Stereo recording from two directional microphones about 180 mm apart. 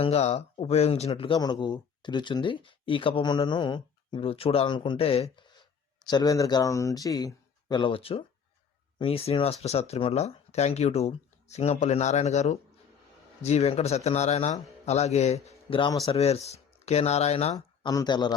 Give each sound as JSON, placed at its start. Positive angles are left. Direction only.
{"t": 0.0, "sound": "speech", "side_deg": 35}
{"t": 6.1, "sound": "speech", "side_deg": 20}
{"t": 17.5, "sound": "speech", "side_deg": 20}